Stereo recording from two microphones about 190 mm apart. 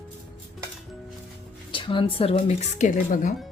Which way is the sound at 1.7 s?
25° left (ahead or behind).